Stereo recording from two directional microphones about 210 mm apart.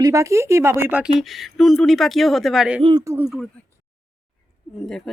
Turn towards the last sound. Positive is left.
turn(degrees=0)  # may be behind; listen again after turning